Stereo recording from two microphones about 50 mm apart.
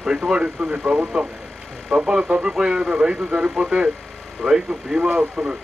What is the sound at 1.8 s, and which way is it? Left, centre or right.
Speech, centre.